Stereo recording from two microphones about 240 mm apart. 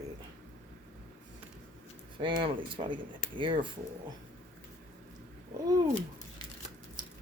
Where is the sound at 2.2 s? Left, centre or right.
Right.